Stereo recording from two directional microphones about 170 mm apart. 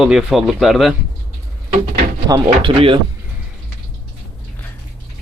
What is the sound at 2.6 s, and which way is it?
Speech, 30° right (ahead or behind).